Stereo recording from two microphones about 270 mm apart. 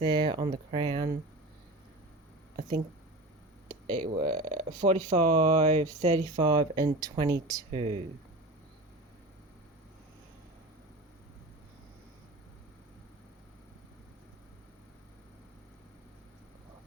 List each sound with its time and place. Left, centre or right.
0.0 s speech: centre
4.0 s speech: right
4.8 s speech: centre